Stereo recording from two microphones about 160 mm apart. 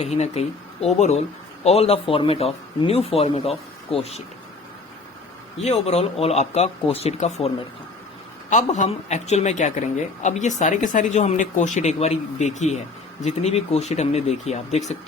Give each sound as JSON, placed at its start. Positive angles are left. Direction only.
{"t": 0.0, "sound": "speech", "side_deg": 40}
{"t": 5.6, "sound": "speech", "side_deg": 45}
{"t": 8.4, "sound": "speech", "side_deg": 50}